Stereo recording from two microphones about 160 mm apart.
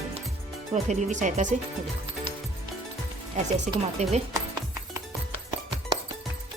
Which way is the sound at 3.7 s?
50° right (ahead or behind).